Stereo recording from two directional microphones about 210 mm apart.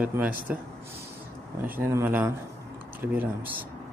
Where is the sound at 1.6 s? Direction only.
10° right (ahead or behind).